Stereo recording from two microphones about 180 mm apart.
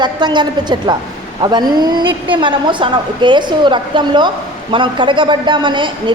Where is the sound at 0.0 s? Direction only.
25° right (ahead or behind).